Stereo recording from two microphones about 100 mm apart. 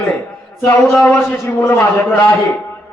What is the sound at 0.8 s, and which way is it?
A man's voice, 25° left (ahead or behind).